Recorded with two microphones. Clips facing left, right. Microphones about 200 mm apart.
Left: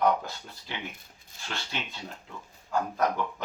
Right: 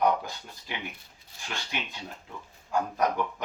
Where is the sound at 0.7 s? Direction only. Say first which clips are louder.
Right 1 dB; 15° right (ahead or behind).